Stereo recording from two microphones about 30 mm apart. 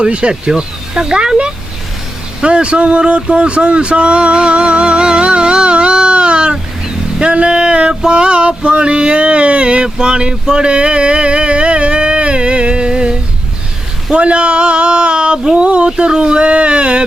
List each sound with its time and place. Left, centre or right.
0.1 s speech: right
2.4 s speech: right
3.0 s music: right
7.2 s a sound: right
14.2 s a sound: right
15.5 s speech: right
16.0 s speech: right